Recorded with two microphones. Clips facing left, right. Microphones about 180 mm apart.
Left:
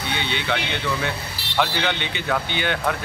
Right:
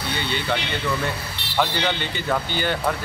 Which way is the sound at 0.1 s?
65° left (ahead or behind).